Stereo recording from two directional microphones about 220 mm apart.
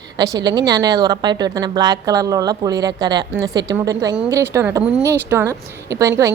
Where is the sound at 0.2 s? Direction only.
20° right (ahead or behind).